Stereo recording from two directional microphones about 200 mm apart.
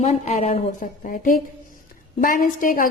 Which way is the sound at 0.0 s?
35° left (ahead or behind).